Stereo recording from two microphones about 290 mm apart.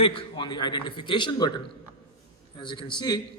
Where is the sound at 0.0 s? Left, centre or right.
Centre.